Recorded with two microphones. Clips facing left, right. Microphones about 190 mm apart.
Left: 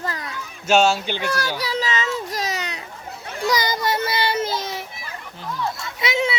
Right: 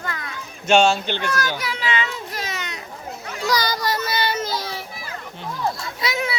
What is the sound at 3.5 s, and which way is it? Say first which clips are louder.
Child singing: left 1 dB; 20° left (ahead or behind).